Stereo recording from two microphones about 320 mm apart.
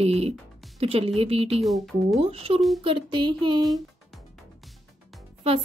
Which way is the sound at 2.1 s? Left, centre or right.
Centre.